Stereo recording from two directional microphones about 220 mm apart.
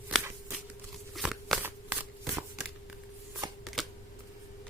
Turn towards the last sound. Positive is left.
turn(degrees=0)  # may be behind; listen again after turning